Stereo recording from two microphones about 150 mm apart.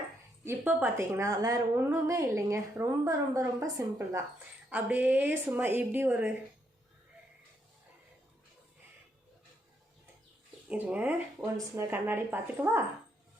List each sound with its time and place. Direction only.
0.4 s a woman's voice: 10° right (ahead or behind)
10.7 s a woman's voice: 10° right (ahead or behind)
11.5 s a woman's voice: 20° right (ahead or behind)